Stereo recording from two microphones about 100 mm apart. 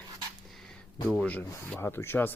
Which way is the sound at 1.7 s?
25° left (ahead or behind).